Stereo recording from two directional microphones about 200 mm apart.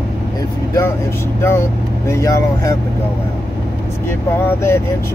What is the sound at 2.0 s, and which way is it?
Speech, 15° left (ahead or behind).